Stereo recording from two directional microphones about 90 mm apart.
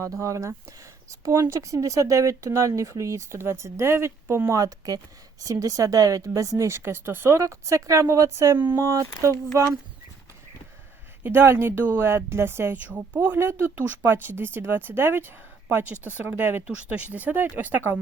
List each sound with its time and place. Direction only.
0.0 s speech: 35° right (ahead or behind)
7.4 s speech: 35° right (ahead or behind)
11.2 s a woman's voice: 25° right (ahead or behind)